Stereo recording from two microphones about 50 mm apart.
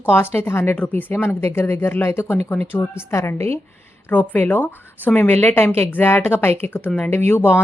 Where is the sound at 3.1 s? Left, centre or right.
Left.